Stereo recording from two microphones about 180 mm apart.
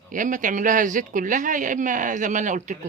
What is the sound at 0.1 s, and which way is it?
Speech, 45° right (ahead or behind).